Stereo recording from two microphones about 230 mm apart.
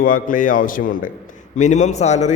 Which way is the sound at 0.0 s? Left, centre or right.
Left.